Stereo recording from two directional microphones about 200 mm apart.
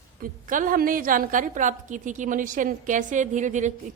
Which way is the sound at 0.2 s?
45° right (ahead or behind).